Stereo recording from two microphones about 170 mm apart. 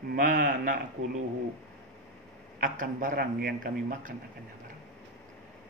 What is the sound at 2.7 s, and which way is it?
Speech, 55° right (ahead or behind).